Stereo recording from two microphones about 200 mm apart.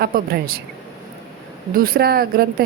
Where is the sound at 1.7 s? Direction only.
45° right (ahead or behind).